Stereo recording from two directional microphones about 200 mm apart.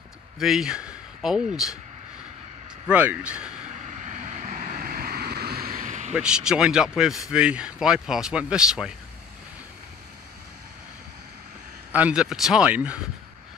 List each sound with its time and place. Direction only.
0.4 s speech: centre (ahead or behind)
2.9 s speech: 5° right (ahead or behind)
4.0 s vehicle: 35° right (ahead or behind)
6.1 s speech: 5° right (ahead or behind)
11.9 s speech: 5° right (ahead or behind)